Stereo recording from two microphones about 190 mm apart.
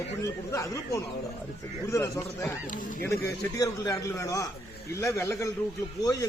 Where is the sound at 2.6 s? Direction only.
45° left (ahead or behind).